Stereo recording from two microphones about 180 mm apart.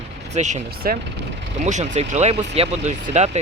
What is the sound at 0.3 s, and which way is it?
Speech, 40° right (ahead or behind).